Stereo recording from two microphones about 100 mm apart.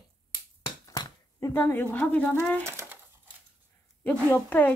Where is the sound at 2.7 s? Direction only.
25° right (ahead or behind).